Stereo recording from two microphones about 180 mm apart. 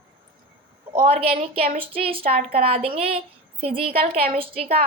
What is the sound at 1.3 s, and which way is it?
Speech, 50° right (ahead or behind).